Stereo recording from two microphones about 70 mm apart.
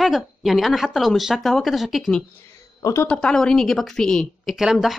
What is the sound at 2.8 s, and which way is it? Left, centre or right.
Speech, left.